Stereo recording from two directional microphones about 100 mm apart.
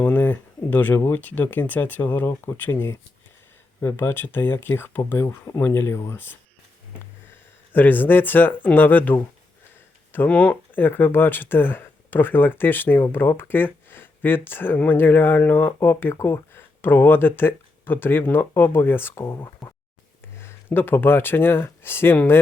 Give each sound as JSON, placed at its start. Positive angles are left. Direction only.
{"t": 0.0, "sound": "speech", "side_deg": 15}
{"t": 7.7, "sound": "speech", "side_deg": 20}